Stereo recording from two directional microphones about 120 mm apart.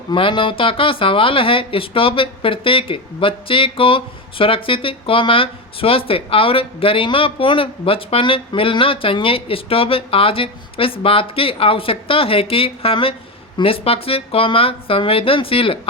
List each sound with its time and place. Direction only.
0.1 s speech: 45° left (ahead or behind)